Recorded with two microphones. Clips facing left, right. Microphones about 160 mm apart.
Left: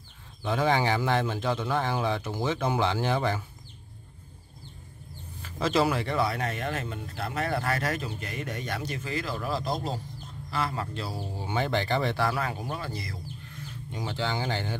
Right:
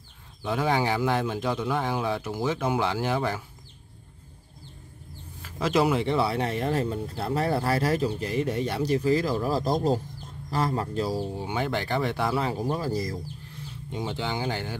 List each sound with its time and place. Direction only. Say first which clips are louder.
0.4 s speech: even; 5° right (ahead or behind)
5.4 s speech: right 2 dB; 10° right (ahead or behind); by 11.1 s 40° right (ahead or behind)
11.1 s speech: right 6 dB; 15° right (ahead or behind)
12.4 s speech: right 5 dB; 25° right (ahead or behind)
13.9 s speech: right 1 dB; 15° right (ahead or behind)